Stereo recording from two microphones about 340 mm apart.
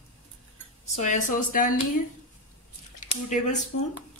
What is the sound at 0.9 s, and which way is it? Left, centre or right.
Speech, left.